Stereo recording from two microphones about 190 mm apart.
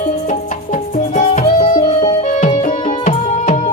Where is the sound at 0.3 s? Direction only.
40° left (ahead or behind).